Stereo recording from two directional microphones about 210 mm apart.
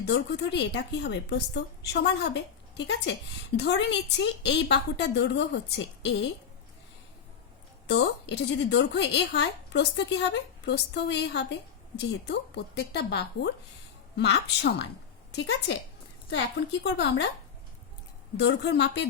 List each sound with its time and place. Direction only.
0.0 s a woman's voice: 55° left (ahead or behind)
7.9 s a woman's voice: 55° left (ahead or behind)
16.8 s a woman's voice: 55° left (ahead or behind)
18.3 s a woman's voice: 55° left (ahead or behind)